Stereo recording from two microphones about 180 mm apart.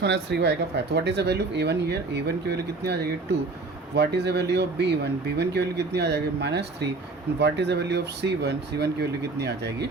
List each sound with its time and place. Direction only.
0.0 s speech: 70° right (ahead or behind)